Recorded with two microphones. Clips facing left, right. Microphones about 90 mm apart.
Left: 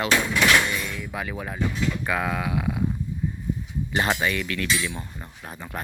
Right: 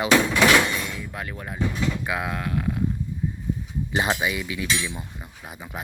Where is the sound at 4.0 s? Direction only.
15° right (ahead or behind).